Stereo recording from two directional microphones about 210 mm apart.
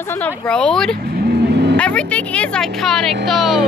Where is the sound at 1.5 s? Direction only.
55° right (ahead or behind).